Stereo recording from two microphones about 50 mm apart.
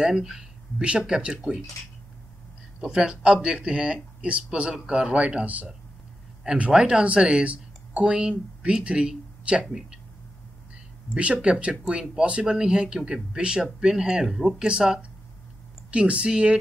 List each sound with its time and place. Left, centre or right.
0.0 s speech: centre
2.8 s speech: centre; by 5.7 s right
6.4 s speech: centre
9.7 s speech: centre
11.5 s speech: centre
14.6 s speech: centre